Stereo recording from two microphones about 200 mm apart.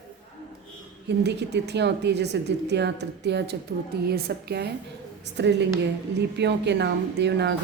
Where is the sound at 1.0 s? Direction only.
60° right (ahead or behind).